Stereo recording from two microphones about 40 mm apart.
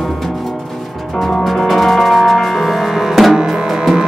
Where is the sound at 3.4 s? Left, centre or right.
Centre.